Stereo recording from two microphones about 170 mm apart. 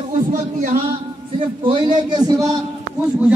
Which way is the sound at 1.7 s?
25° right (ahead or behind).